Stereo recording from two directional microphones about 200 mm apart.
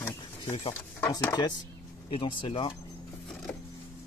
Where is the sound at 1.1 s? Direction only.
20° left (ahead or behind).